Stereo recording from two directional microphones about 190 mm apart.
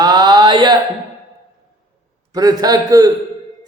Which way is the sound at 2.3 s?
20° right (ahead or behind).